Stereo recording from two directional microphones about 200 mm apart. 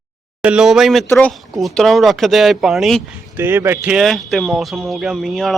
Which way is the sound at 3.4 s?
10° right (ahead or behind).